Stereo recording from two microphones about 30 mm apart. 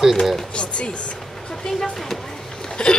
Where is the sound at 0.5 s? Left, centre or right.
Left.